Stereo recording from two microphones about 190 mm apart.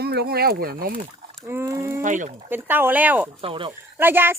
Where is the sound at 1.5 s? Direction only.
15° right (ahead or behind).